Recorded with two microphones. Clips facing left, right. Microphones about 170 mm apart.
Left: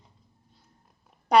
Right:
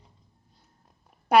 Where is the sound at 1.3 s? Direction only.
5° right (ahead or behind).